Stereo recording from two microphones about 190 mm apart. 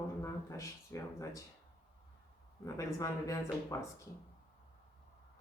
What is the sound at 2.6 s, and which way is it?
Speech, 15° left (ahead or behind).